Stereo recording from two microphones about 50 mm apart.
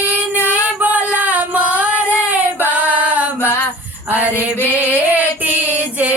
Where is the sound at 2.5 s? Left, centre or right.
Right.